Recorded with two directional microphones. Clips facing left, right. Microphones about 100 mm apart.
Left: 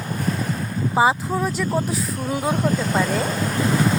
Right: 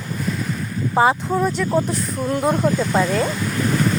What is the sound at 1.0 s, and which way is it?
A woman's voice, 5° left (ahead or behind).